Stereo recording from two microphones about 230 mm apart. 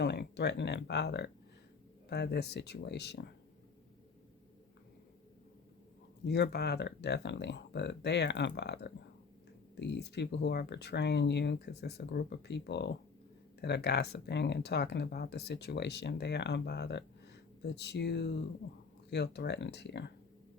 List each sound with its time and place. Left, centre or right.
0.0 s speech: left
6.2 s speech: left